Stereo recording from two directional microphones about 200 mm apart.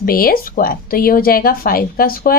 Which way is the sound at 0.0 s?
45° left (ahead or behind).